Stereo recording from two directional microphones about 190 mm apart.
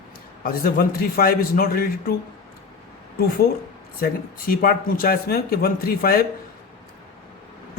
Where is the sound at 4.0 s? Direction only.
50° left (ahead or behind).